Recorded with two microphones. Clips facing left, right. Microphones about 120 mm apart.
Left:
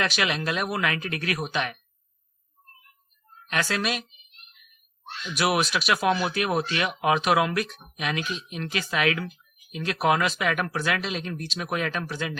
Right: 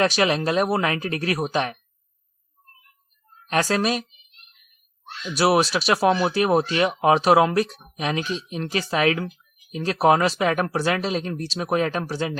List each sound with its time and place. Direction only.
0.0 s speech: 35° right (ahead or behind)
3.5 s speech: 35° right (ahead or behind)
5.3 s speech: 30° right (ahead or behind)